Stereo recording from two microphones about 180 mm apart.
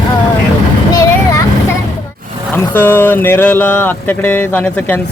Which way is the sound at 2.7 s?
10° left (ahead or behind).